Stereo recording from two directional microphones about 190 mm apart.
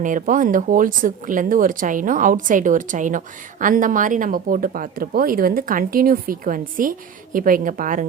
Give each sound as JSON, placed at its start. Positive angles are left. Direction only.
{"t": 0.0, "sound": "speech", "side_deg": -45}